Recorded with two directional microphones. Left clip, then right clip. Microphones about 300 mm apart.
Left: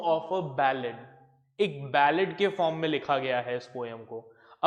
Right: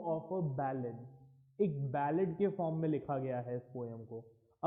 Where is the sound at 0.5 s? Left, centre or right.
Centre.